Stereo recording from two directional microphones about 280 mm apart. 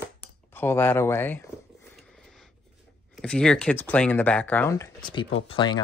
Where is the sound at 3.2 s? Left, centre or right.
Centre.